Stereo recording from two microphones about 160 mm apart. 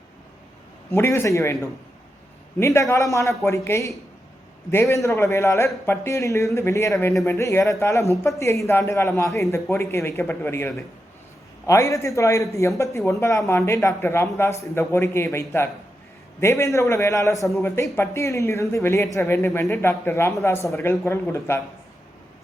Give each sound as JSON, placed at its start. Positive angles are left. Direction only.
{"t": 0.9, "sound": "a man's voice", "side_deg": 15}
{"t": 2.6, "sound": "a man's voice", "side_deg": 15}